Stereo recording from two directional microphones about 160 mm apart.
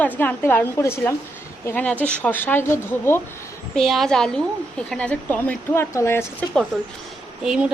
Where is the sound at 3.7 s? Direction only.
Centre (ahead or behind); by 6.2 s 15° left (ahead or behind).